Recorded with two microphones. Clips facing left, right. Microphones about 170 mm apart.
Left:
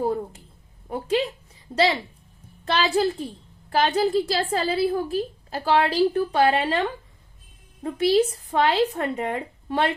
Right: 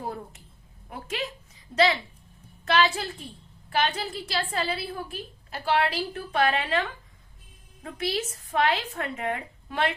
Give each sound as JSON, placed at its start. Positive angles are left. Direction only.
{"t": 0.9, "sound": "a woman's voice", "side_deg": 30}